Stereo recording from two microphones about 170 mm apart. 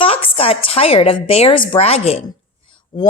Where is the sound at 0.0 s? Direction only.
30° left (ahead or behind).